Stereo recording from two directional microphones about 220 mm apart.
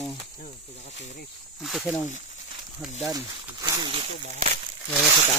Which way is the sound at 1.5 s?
Centre (ahead or behind).